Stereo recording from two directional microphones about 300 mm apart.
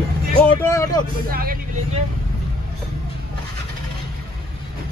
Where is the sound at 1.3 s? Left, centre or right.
Right.